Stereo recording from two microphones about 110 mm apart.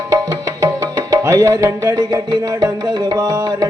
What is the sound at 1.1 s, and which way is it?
Music, 25° right (ahead or behind).